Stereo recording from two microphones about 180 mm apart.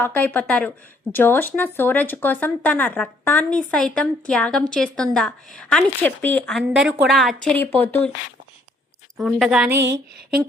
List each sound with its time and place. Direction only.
0.0 s speech: 10° left (ahead or behind)
6.6 s a woman's voice: centre (ahead or behind)
7.4 s speech: 10° left (ahead or behind)
9.1 s a woman's voice: 5° right (ahead or behind)
9.7 s a sound: 75° right (ahead or behind)